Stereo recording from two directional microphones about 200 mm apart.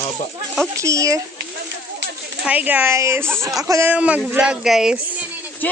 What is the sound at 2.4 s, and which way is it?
A woman's voice, 10° right (ahead or behind).